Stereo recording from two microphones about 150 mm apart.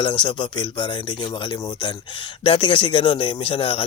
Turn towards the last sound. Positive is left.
turn(degrees=35)  # may be behind; listen again after turning